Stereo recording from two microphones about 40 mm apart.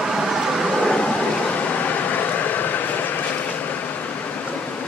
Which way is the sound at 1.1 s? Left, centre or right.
Left.